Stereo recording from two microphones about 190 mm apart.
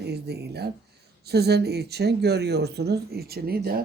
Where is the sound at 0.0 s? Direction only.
60° right (ahead or behind).